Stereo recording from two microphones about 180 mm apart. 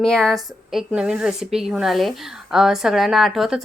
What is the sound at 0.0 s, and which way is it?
A woman's voice, 5° left (ahead or behind).